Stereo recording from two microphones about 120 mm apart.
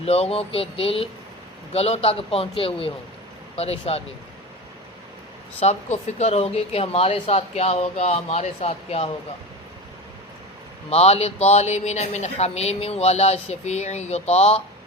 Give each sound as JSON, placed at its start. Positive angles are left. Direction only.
{"t": 0.0, "sound": "a man's voice", "side_deg": 55}
{"t": 5.5, "sound": "a man's voice", "side_deg": 65}
{"t": 10.8, "sound": "a man's voice", "side_deg": 60}